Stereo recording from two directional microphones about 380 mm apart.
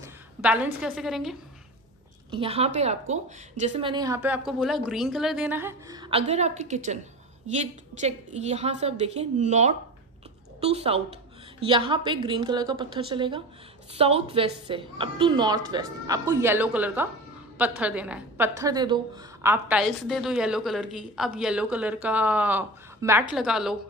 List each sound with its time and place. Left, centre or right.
0.0 s a woman's voice: centre
2.3 s a woman's voice: centre